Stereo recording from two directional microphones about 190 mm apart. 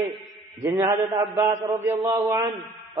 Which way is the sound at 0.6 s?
15° right (ahead or behind).